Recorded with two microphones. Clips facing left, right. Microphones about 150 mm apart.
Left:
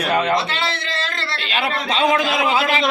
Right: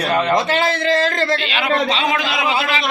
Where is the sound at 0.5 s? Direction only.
45° right (ahead or behind).